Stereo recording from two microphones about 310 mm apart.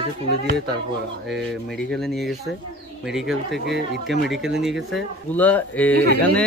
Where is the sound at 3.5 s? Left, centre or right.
Right.